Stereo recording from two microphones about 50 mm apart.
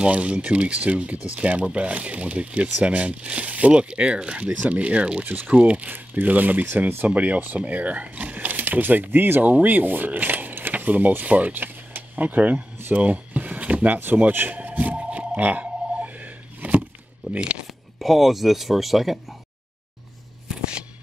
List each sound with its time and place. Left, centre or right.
0.0 s speech: right
5.2 s speech: right
9.4 s speech: right
12.8 s a sound: right
14.3 s a sound: right
17.9 s speech: centre